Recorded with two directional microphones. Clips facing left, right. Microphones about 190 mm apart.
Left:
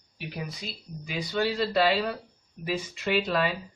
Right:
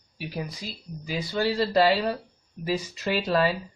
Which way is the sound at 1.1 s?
35° right (ahead or behind).